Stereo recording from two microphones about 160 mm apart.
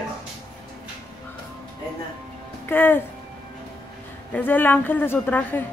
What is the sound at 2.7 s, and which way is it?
Speech, 15° left (ahead or behind).